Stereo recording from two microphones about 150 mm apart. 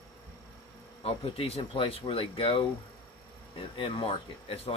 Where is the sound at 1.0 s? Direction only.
40° left (ahead or behind).